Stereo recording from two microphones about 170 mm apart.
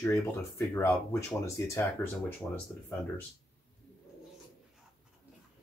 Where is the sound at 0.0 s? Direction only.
15° left (ahead or behind).